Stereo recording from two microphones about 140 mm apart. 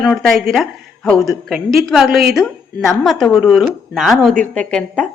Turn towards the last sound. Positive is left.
turn(degrees=5)  # may be behind; listen again after turning